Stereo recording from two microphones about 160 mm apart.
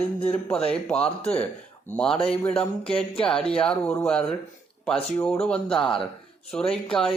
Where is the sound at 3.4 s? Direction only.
5° left (ahead or behind).